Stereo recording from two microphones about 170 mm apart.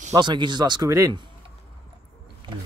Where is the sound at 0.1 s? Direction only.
25° right (ahead or behind).